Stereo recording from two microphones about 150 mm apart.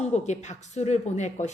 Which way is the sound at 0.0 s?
50° left (ahead or behind).